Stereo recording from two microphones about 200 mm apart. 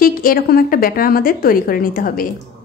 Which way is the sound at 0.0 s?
45° left (ahead or behind).